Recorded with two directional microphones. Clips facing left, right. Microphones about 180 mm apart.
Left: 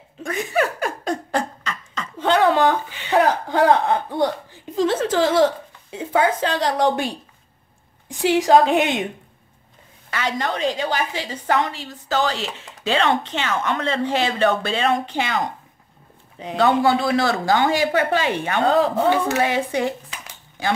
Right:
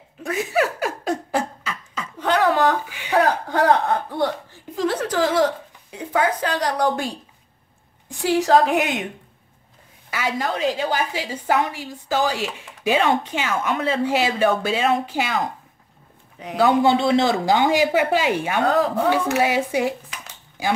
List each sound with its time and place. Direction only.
0.2 s beatboxing: 5° right (ahead or behind)
2.1 s a sound: 25° left (ahead or behind)
8.1 s a woman's voice: 20° left (ahead or behind)
10.1 s a woman's voice: 5° right (ahead or behind)
16.4 s a woman's voice: 25° left (ahead or behind)
16.8 s a woman's voice: 25° right (ahead or behind); by 18.6 s 10° right (ahead or behind)
18.6 s a woman's voice: 25° left (ahead or behind)
19.3 s a woman's voice: 10° right (ahead or behind)